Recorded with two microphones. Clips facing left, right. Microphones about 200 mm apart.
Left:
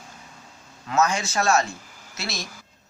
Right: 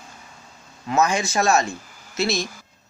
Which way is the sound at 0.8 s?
15° right (ahead or behind).